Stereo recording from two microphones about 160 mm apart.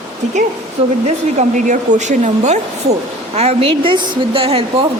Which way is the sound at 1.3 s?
50° right (ahead or behind).